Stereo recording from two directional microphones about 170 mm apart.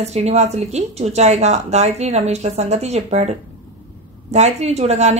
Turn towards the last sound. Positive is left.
turn(degrees=-40)  # may be behind; listen again after turning